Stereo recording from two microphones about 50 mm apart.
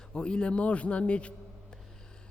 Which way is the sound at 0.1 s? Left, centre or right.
Centre.